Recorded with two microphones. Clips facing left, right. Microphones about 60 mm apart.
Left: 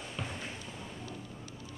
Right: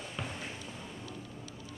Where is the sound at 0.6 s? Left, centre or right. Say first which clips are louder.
Even; left.